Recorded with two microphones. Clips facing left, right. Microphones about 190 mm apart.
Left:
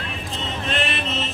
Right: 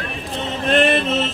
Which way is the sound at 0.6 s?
50° right (ahead or behind).